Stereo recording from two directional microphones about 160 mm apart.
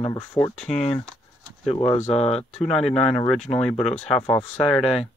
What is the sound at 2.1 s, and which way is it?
Speech, 40° left (ahead or behind).